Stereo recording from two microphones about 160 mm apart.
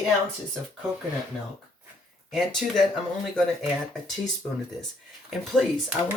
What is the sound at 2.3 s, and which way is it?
Speech, centre (ahead or behind).